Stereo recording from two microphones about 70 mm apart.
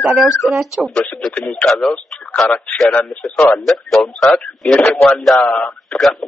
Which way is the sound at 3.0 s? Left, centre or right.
Left.